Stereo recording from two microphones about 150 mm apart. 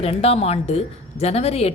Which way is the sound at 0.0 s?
40° left (ahead or behind).